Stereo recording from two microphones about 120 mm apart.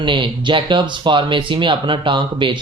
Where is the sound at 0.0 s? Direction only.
40° right (ahead or behind).